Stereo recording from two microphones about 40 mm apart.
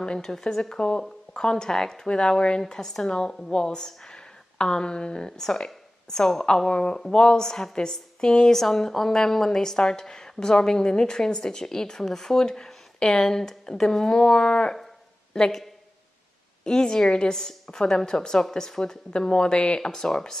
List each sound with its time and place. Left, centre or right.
0.0 s a woman's voice: centre
16.6 s a woman's voice: centre